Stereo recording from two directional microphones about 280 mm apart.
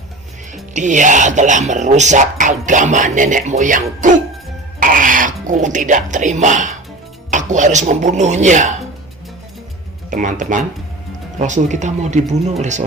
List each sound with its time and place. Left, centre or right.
0.7 s speech: right
10.1 s speech: right